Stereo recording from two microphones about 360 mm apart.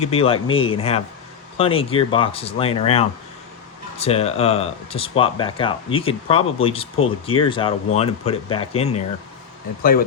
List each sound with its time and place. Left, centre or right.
0.0 s speech: centre